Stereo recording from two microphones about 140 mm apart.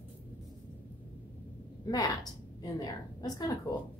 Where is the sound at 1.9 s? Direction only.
30° left (ahead or behind).